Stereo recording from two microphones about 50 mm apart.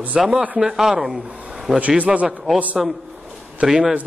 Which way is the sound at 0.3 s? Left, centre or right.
Right.